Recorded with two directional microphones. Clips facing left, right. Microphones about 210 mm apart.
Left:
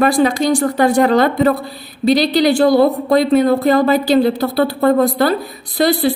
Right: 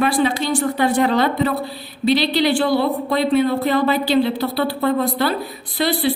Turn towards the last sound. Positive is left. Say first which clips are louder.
# left 5 dB
turn(degrees=45)  # may be behind; listen again after turning